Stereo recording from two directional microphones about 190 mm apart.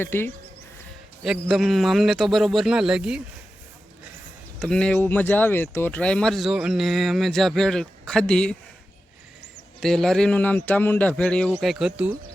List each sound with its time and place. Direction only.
0.0 s speech: 10° left (ahead or behind)
1.2 s speech: centre (ahead or behind)
4.6 s speech: 5° left (ahead or behind)
9.8 s speech: 5° left (ahead or behind)